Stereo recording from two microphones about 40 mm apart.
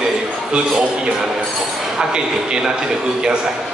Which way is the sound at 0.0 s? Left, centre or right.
Right.